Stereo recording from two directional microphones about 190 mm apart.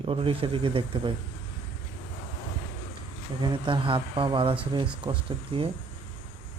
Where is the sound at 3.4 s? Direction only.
25° right (ahead or behind).